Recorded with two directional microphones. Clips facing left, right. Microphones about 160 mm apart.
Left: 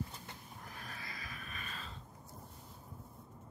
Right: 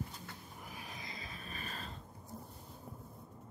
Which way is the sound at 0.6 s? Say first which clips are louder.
Right 1 dB; 10° right (ahead or behind).